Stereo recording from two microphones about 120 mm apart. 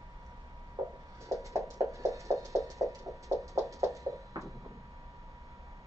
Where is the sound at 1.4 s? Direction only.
25° right (ahead or behind).